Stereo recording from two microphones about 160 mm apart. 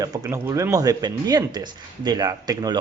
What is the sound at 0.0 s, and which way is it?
Speech, 20° right (ahead or behind).